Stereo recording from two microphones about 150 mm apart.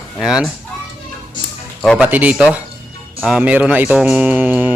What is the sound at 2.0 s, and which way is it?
Speech, 10° right (ahead or behind).